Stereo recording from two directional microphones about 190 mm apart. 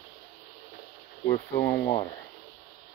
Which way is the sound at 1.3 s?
15° left (ahead or behind).